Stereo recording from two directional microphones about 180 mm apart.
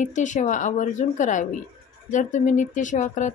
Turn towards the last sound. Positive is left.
turn(degrees=45)  # may be behind; listen again after turning